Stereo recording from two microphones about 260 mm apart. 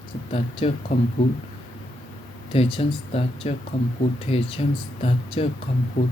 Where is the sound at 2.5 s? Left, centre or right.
Left.